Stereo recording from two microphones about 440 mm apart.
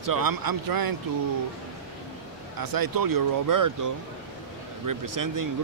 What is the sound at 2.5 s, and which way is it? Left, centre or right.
Speech, right.